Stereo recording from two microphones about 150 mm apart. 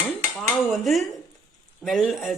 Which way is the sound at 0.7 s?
Centre (ahead or behind).